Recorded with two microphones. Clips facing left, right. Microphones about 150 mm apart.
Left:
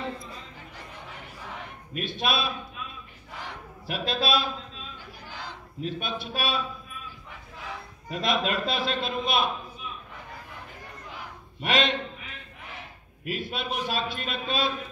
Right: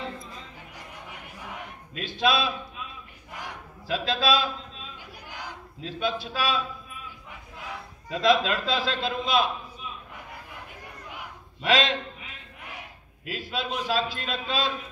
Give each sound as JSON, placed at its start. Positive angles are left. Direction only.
{"t": 0.7, "sound": "a sound", "side_deg": -10}
{"t": 2.0, "sound": "a man's voice", "side_deg": -90}
{"t": 3.8, "sound": "a man's voice", "side_deg": -90}
{"t": 5.3, "sound": "battle cry", "side_deg": -15}
{"t": 5.9, "sound": "a man's voice", "side_deg": -90}
{"t": 8.1, "sound": "a man's voice", "side_deg": -90}
{"t": 11.6, "sound": "a man's voice", "side_deg": -90}
{"t": 13.2, "sound": "a man's voice", "side_deg": -90}